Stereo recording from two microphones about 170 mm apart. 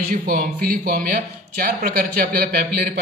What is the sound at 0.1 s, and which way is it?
Speech, 55° right (ahead or behind).